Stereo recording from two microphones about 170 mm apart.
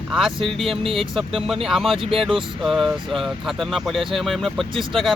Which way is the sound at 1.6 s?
Centre (ahead or behind).